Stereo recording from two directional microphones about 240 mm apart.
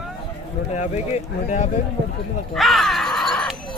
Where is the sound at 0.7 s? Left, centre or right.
Left.